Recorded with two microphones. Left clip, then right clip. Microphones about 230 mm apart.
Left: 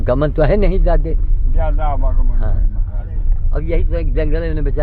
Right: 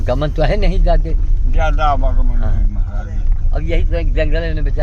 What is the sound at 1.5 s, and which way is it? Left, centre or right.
Speech, right.